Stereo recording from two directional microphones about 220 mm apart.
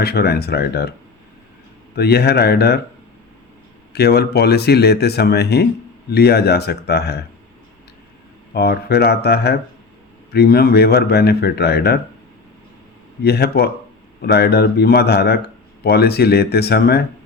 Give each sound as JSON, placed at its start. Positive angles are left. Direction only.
{"t": 0.0, "sound": "speech", "side_deg": 45}
{"t": 2.0, "sound": "speech", "side_deg": 45}
{"t": 3.9, "sound": "speech", "side_deg": 45}
{"t": 8.5, "sound": "speech", "side_deg": 45}
{"t": 13.2, "sound": "speech", "side_deg": 45}